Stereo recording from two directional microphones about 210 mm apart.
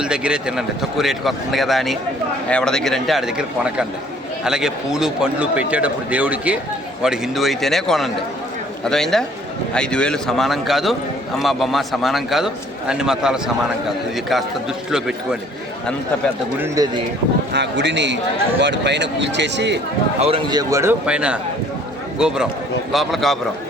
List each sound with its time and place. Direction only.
0.0 s a man's voice: 5° right (ahead or behind)
14.8 s speech: 5° right (ahead or behind)
16.6 s a man's voice: 15° right (ahead or behind)
17.5 s speech: 55° right (ahead or behind)
20.1 s a man's voice: 30° right (ahead or behind); by 23.4 s centre (ahead or behind)